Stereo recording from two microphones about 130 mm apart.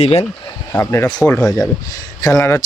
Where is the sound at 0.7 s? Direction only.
15° left (ahead or behind).